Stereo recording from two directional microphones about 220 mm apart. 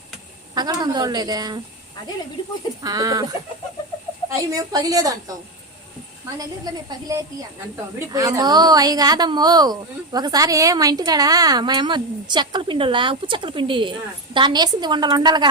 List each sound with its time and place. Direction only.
0.5 s a woman's voice: 20° right (ahead or behind)
2.8 s a woman's voice: 15° right (ahead or behind)
4.3 s a woman's voice: 15° right (ahead or behind)
7.9 s a woman's voice: 15° right (ahead or behind)